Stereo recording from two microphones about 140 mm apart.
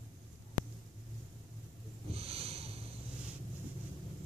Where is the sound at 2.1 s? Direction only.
45° right (ahead or behind).